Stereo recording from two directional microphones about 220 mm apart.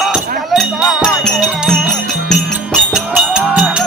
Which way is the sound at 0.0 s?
Centre (ahead or behind).